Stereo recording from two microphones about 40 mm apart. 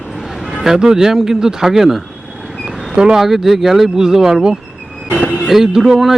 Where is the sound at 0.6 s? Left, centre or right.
Centre.